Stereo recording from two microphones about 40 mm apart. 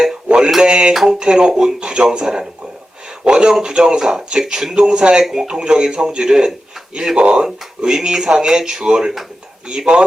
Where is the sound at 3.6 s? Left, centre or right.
Right.